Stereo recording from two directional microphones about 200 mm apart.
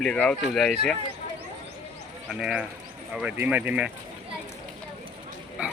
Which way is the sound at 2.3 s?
5° right (ahead or behind).